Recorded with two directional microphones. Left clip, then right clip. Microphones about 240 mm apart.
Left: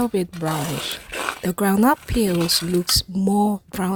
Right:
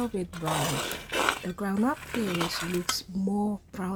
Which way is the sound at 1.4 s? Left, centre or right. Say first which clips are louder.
Left 11 dB; left.